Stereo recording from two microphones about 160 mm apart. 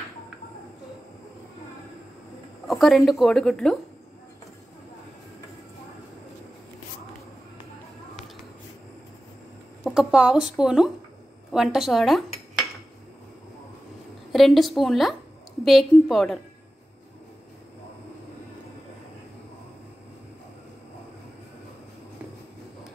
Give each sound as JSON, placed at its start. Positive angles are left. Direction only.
{"t": 2.7, "sound": "speech", "side_deg": 0}
{"t": 9.8, "sound": "speech", "side_deg": -5}
{"t": 14.3, "sound": "speech", "side_deg": 0}